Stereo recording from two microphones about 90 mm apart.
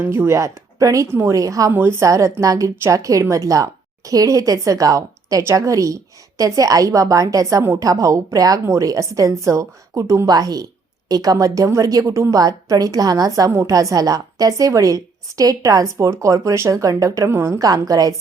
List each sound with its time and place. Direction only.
0.0 s speech: 25° right (ahead or behind)
1.1 s a woman's voice: 25° right (ahead or behind)
1.4 s speech: 40° right (ahead or behind)
13.5 s a woman's voice: 30° right (ahead or behind)
13.7 s speech: 40° right (ahead or behind)